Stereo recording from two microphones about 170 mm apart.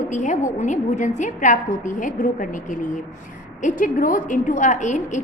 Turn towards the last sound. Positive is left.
turn(degrees=45)  # may be behind; listen again after turning